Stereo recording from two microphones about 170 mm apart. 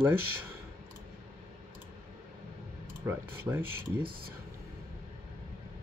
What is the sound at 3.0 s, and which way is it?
Speech, 10° right (ahead or behind).